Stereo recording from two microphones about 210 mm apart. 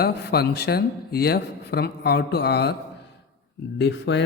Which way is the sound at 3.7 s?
55° left (ahead or behind).